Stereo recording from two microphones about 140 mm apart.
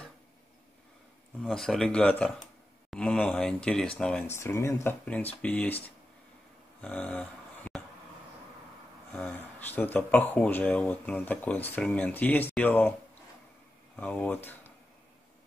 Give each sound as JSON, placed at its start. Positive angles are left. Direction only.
{"t": 1.4, "sound": "speech", "side_deg": 0}
{"t": 4.3, "sound": "speech", "side_deg": 20}
{"t": 6.8, "sound": "a sound", "side_deg": 10}
{"t": 9.1, "sound": "speech", "side_deg": 10}
{"t": 13.9, "sound": "speech", "side_deg": 5}